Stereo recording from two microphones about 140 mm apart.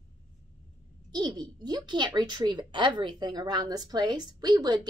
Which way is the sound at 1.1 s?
30° right (ahead or behind).